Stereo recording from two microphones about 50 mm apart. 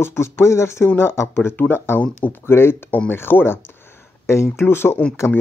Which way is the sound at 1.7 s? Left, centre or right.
Left.